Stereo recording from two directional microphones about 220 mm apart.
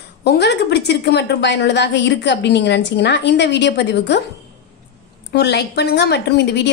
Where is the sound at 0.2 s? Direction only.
50° left (ahead or behind).